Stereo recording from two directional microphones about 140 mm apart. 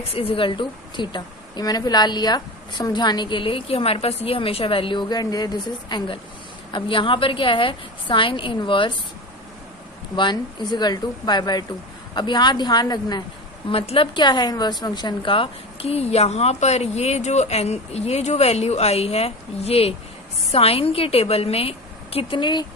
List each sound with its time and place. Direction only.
0.1 s a woman's voice: 40° left (ahead or behind)
10.1 s a woman's voice: 35° left (ahead or behind)
13.7 s a woman's voice: 40° left (ahead or behind)